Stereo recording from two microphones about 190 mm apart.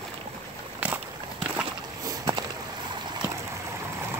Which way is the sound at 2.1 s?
20° right (ahead or behind).